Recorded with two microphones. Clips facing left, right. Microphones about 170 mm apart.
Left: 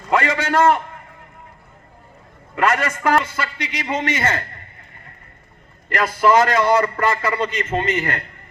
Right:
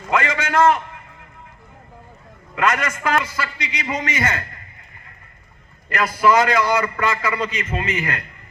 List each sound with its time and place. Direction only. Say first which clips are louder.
0.1 s a man's voice: left 2 dB; 30° left (ahead or behind)
2.6 s a man's voice: left 2 dB; 35° left (ahead or behind)
5.9 s a man's voice: left 1 dB; 30° left (ahead or behind)